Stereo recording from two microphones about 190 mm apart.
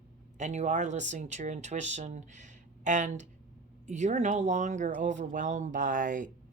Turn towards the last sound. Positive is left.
turn(degrees=-45)  # may be behind; listen again after turning